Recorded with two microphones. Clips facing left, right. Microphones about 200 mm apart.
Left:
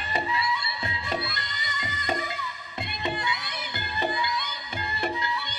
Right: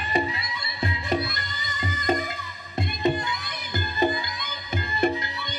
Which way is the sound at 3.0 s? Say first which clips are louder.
Right 6 dB; 40° right (ahead or behind).